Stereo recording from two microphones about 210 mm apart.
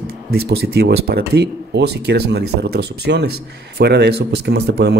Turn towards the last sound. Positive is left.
turn(degrees=-50)  # may be behind; listen again after turning